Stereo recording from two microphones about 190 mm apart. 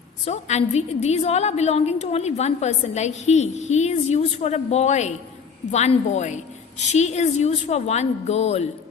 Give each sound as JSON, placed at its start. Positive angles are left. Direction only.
{"t": 0.3, "sound": "a woman's voice", "side_deg": 35}